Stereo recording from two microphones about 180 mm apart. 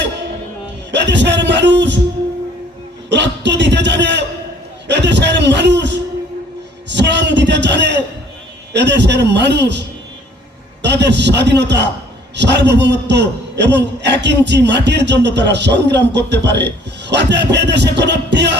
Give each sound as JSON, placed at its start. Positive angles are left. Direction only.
{"t": 0.9, "sound": "a man's voice", "side_deg": -75}
{"t": 3.1, "sound": "a sound", "side_deg": -75}
{"t": 4.9, "sound": "a man's voice", "side_deg": -75}
{"t": 6.9, "sound": "a sound", "side_deg": -75}
{"t": 8.7, "sound": "a man's voice", "side_deg": -75}
{"t": 10.8, "sound": "a man's voice", "side_deg": -75}